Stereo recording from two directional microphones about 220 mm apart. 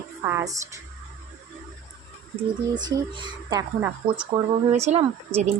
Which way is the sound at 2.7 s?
20° right (ahead or behind).